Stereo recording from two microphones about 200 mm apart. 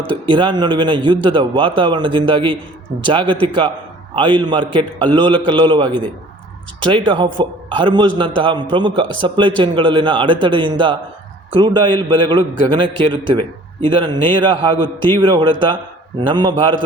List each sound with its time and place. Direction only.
0.1 s a man's voice: 25° right (ahead or behind)